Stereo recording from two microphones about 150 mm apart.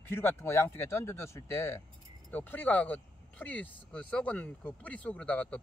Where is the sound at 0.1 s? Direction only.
15° left (ahead or behind).